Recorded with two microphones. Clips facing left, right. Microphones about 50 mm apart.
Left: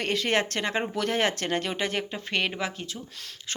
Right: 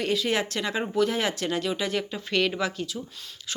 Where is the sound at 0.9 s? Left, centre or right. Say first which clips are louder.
Right 4 dB; left.